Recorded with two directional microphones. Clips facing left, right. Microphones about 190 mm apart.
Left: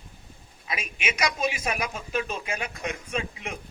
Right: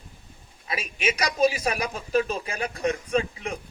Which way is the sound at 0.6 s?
35° right (ahead or behind).